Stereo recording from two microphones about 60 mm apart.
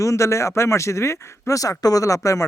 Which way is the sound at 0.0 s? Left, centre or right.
Left.